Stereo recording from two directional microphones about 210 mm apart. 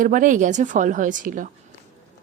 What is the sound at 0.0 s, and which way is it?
A woman's voice, 40° right (ahead or behind).